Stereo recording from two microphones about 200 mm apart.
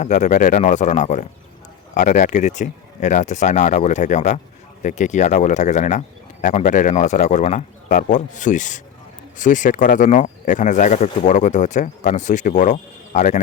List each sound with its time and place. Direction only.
0.0 s speech: 35° left (ahead or behind)